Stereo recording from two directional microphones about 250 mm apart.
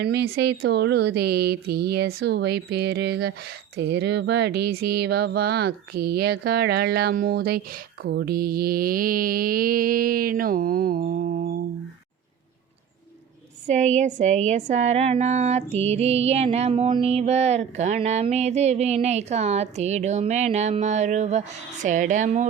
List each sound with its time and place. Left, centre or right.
0.0 s mantra: right
13.7 s speech: right